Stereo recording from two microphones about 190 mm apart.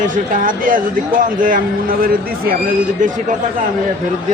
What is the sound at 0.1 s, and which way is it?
A man's voice, 45° right (ahead or behind).